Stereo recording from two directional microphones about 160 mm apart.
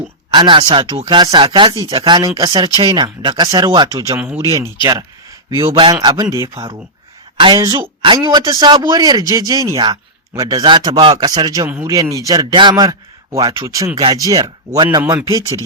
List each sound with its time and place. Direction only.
0.3 s a man's voice: 30° right (ahead or behind)
4.2 s speech: 10° right (ahead or behind)
4.4 s a man's voice: 20° right (ahead or behind)
7.6 s a man's voice: 20° right (ahead or behind)
8.0 s a man's voice: 30° right (ahead or behind)